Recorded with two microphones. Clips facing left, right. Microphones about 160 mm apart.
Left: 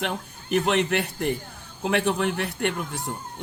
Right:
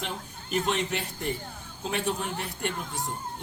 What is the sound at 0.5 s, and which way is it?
A man's voice, 65° left (ahead or behind).